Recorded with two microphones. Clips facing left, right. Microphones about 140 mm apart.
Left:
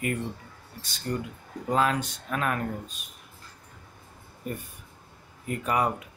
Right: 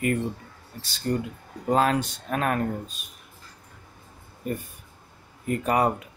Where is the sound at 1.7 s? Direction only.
35° right (ahead or behind).